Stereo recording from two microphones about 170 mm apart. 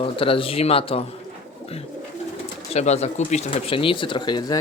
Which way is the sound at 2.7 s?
40° left (ahead or behind).